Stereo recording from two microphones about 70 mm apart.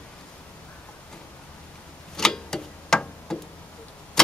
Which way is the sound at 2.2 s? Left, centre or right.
Centre.